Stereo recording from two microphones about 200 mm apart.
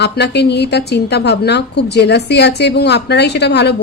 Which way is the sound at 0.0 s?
55° left (ahead or behind).